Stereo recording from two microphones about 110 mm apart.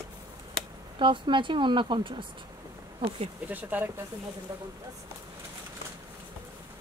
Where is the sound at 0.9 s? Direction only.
50° right (ahead or behind).